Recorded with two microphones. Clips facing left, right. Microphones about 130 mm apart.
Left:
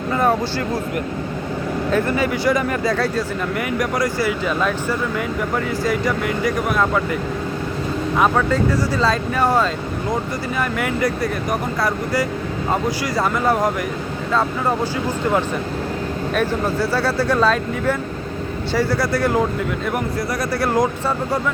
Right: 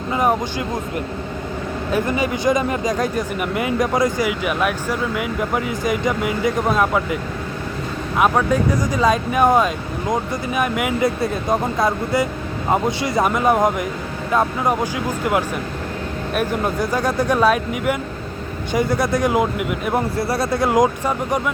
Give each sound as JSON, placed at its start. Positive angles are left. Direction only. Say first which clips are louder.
{"t": 0.1, "sound": "a sound", "louder": "even", "side_deg": -15}
{"t": 1.9, "sound": "speech", "louder": "even", "side_deg": -15}
{"t": 8.2, "sound": "speech", "louder": "right 1 dB", "side_deg": -15}
{"t": 16.3, "sound": "speech", "louder": "even", "side_deg": -15}
{"t": 19.9, "sound": "speech", "louder": "right 2 dB", "side_deg": -30}